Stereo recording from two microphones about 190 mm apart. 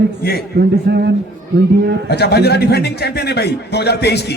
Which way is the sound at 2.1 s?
60° left (ahead or behind).